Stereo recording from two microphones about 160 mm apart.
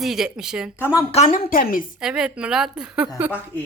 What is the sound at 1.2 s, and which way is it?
Speech, 60° left (ahead or behind).